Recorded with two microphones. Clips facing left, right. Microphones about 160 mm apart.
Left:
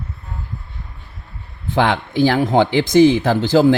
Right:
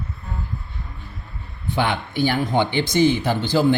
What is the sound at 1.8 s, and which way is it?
Speech, 90° left.